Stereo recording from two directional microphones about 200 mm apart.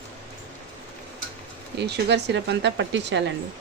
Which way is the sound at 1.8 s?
60° right (ahead or behind).